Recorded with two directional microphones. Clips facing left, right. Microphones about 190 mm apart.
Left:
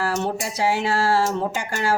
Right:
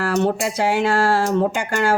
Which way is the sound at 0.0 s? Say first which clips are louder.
Right 5 dB; 60° right (ahead or behind).